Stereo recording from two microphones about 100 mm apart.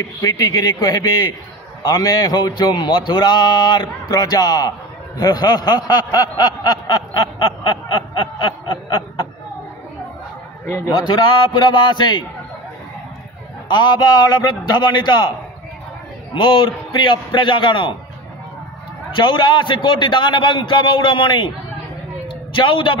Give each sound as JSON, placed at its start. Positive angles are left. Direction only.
{"t": 0.2, "sound": "a man's voice", "side_deg": 40}
{"t": 11.1, "sound": "a man's voice", "side_deg": 50}
{"t": 13.7, "sound": "a man's voice", "side_deg": 50}
{"t": 16.3, "sound": "a man's voice", "side_deg": 55}
{"t": 19.1, "sound": "a man's voice", "side_deg": 50}
{"t": 22.5, "sound": "a man's voice", "side_deg": 55}